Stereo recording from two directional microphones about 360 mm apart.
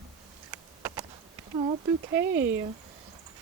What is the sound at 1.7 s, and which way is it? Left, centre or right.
Speech, centre.